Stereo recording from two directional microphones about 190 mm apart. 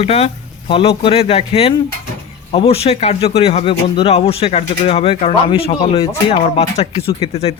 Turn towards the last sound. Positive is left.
turn(degrees=30)  # may be behind; listen again after turning